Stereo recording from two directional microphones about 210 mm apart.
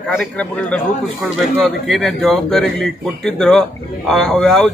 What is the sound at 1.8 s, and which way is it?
Speech, centre (ahead or behind).